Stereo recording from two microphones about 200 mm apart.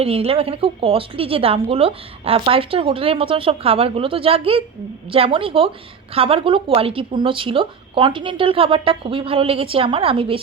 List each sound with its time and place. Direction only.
0.0 s a woman's voice: 30° right (ahead or behind)